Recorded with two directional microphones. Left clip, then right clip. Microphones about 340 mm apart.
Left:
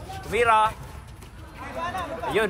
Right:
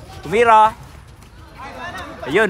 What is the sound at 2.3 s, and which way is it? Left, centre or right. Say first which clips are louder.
Speech: right 8 dB; right.